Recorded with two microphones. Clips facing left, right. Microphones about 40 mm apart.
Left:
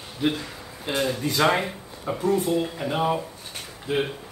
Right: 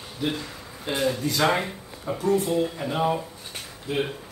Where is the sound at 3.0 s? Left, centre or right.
Centre.